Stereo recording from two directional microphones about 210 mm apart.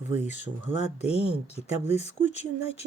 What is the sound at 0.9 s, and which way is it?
Speech, 30° left (ahead or behind).